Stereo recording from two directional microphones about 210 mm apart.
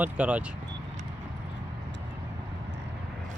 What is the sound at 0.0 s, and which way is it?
Speech, 5° right (ahead or behind).